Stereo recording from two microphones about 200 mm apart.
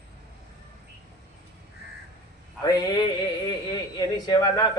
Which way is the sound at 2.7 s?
20° left (ahead or behind).